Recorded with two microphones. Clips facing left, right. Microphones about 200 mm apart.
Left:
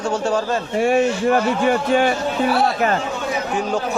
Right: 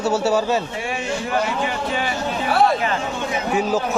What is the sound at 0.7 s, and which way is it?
Speech, 45° left (ahead or behind).